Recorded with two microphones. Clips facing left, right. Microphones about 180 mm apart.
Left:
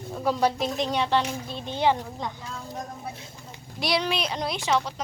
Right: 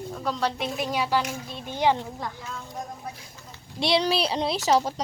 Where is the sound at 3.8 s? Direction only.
30° right (ahead or behind).